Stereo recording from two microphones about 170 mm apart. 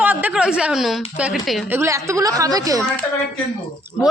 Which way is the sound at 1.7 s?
15° right (ahead or behind).